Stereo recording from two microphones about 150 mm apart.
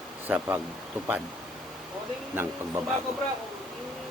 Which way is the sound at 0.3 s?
15° right (ahead or behind).